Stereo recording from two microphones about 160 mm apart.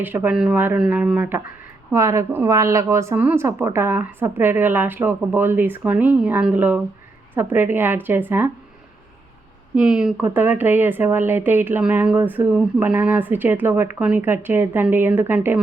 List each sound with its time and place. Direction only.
0.0 s speech: 10° right (ahead or behind)
9.7 s speech: 5° right (ahead or behind)